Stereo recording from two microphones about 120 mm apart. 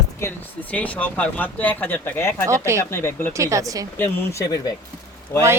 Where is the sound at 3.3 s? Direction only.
25° right (ahead or behind).